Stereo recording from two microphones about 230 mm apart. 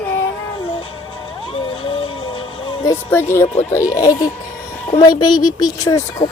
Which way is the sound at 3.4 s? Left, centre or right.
Left.